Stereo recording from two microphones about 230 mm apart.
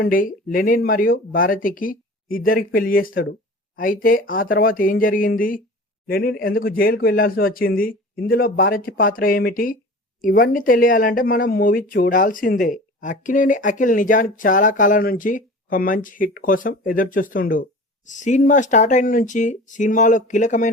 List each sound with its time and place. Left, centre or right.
0.0 s speech: left